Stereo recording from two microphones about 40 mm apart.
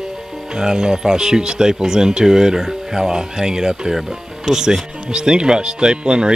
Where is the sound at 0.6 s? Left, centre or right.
Centre.